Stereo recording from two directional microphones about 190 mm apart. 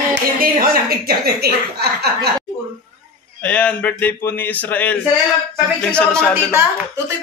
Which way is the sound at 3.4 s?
10° left (ahead or behind).